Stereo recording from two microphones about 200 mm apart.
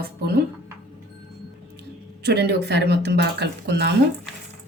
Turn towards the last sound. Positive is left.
turn(degrees=-60)  # may be behind; listen again after turning